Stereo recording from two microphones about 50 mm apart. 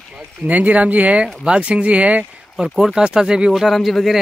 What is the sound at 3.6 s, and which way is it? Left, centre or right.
Speech, centre.